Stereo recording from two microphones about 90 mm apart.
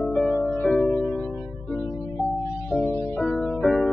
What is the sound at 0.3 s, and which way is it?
Music, 25° left (ahead or behind).